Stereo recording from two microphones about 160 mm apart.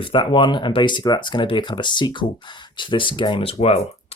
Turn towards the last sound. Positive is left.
turn(degrees=40)  # may be behind; listen again after turning